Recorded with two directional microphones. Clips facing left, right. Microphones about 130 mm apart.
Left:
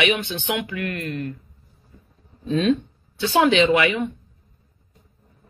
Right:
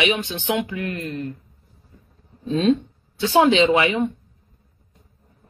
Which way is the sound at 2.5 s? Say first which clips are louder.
Right 1 dB; 30° right (ahead or behind).